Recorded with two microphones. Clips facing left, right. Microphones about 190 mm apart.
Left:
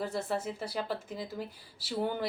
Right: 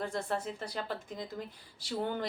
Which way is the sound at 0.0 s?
5° left (ahead or behind).